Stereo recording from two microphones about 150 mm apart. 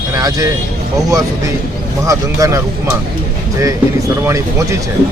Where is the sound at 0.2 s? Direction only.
25° right (ahead or behind).